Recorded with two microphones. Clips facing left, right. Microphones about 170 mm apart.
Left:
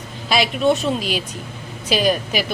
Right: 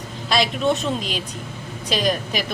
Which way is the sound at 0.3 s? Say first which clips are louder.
Left 3 dB; 5° left (ahead or behind).